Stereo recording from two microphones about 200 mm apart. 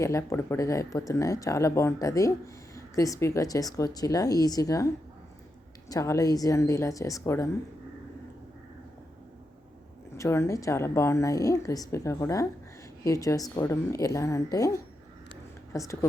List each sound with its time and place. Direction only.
0.0 s a woman's voice: 15° left (ahead or behind)
5.9 s a woman's voice: 15° left (ahead or behind)
10.2 s a woman's voice: 15° left (ahead or behind)